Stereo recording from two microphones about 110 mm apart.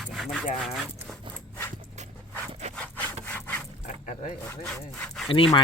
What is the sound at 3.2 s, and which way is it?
Wood, 15° left (ahead or behind).